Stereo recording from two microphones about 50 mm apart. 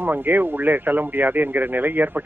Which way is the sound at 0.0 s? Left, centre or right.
Right.